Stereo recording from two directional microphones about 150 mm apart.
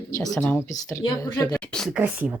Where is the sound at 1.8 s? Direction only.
10° right (ahead or behind).